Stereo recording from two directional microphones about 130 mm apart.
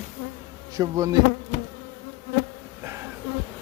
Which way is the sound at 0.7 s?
25° right (ahead or behind).